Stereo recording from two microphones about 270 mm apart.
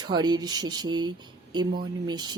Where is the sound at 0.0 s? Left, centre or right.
Centre.